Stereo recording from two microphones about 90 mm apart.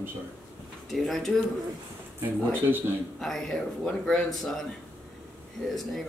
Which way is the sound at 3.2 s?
5° left (ahead or behind).